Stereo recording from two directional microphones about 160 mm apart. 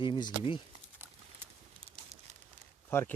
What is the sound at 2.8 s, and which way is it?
Speech, 15° left (ahead or behind).